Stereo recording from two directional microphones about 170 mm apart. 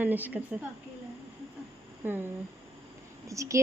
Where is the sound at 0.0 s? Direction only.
10° right (ahead or behind).